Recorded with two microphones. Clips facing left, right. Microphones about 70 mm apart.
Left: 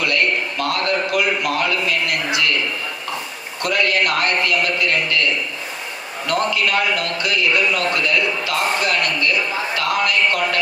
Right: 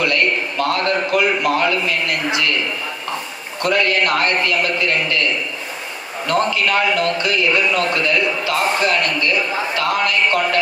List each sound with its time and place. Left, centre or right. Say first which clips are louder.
0.6 s a man's voice: right 3 dB; right
3.6 s a man's voice: right 2 dB; right
6.2 s a man's voice: right 2 dB; right